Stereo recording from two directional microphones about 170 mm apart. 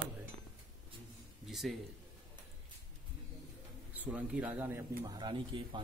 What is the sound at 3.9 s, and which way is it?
Speech, 10° right (ahead or behind).